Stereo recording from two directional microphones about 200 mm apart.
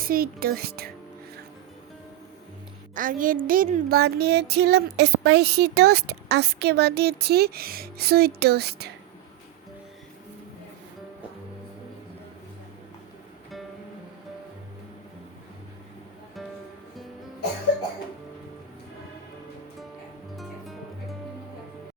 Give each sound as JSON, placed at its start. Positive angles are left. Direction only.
{"t": 0.0, "sound": "speech", "side_deg": -45}
{"t": 2.9, "sound": "speech", "side_deg": -45}
{"t": 20.3, "sound": "music", "side_deg": 0}